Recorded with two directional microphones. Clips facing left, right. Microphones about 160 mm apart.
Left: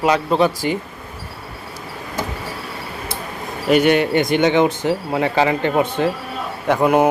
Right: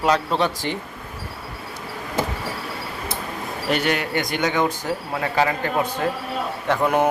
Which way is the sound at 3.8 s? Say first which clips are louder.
Left 8 dB; 20° left (ahead or behind).